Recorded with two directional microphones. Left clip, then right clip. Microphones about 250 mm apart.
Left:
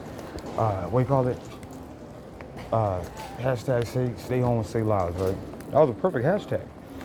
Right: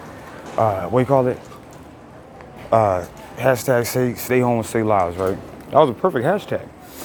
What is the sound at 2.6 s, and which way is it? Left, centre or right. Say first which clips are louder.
Speech: right 10 dB; right.